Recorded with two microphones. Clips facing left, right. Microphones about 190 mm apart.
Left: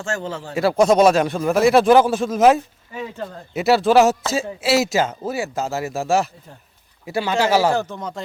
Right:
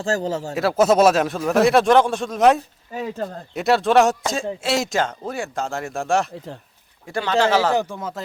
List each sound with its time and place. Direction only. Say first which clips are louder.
0.0 s speech: right 4 dB; 35° right (ahead or behind)
0.5 s speech: left 2 dB; centre (ahead or behind)
2.9 s speech: right 3 dB; 40° right (ahead or behind)
3.5 s speech: left 2 dB; 5° left (ahead or behind)
7.8 s speech: right 1 dB; 10° right (ahead or behind)